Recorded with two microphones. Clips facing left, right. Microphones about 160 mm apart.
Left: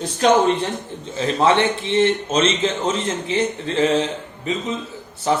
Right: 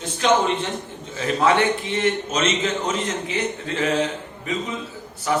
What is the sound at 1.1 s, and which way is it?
A man's voice, 25° left (ahead or behind).